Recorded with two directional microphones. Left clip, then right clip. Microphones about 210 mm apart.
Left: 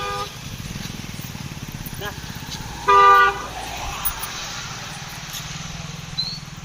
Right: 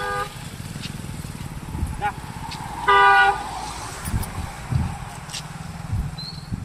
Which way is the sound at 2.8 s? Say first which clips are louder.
Left 2 dB; 15° right (ahead or behind).